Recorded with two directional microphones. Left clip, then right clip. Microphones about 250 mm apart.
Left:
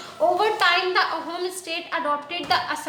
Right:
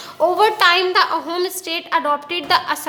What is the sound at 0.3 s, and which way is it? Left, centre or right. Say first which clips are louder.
A woman's voice: right 8 dB; right.